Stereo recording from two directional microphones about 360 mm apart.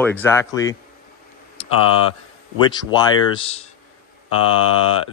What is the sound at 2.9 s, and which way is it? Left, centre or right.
Speech, centre.